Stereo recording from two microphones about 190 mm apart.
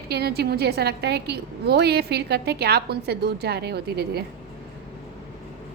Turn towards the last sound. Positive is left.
turn(degrees=-55)  # may be behind; listen again after turning